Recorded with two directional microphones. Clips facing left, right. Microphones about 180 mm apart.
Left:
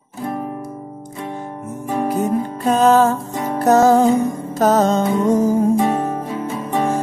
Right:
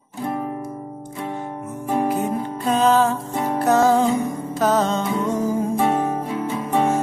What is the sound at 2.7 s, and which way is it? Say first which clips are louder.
Music: left 4 dB; 45° left (ahead or behind).